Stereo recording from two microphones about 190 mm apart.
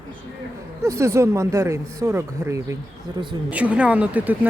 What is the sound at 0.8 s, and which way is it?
Speech, 15° right (ahead or behind).